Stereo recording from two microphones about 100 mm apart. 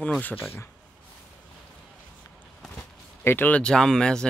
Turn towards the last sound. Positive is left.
turn(degrees=10)  # may be behind; listen again after turning